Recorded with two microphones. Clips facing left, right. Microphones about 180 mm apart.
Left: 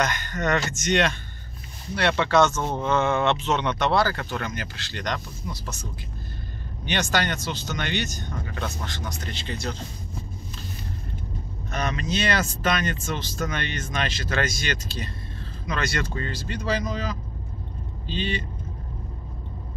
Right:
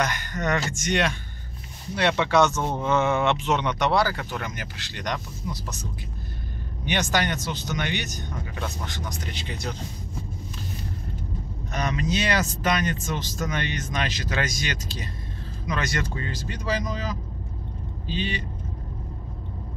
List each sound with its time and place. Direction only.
0.0 s speech: 10° right (ahead or behind)
6.9 s speech: 15° right (ahead or behind)
11.7 s speech: 15° right (ahead or behind)